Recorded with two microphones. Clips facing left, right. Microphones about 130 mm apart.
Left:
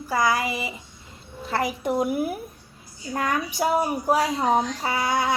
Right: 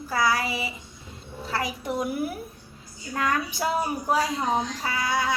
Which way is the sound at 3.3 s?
15° left (ahead or behind).